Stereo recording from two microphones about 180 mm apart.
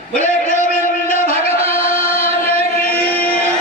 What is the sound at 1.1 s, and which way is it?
Music, 35° right (ahead or behind).